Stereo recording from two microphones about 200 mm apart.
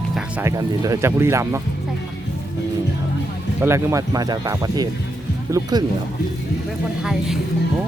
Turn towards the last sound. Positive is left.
turn(degrees=0)  # may be behind; listen again after turning